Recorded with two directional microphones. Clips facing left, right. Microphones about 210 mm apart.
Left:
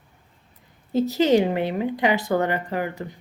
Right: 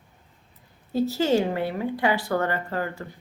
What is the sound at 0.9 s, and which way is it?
A woman's voice, 20° left (ahead or behind).